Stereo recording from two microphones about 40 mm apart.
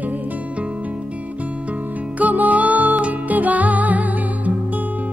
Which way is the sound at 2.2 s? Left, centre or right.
Right.